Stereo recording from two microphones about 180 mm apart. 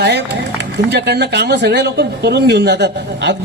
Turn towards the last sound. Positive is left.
turn(degrees=-70)  # may be behind; listen again after turning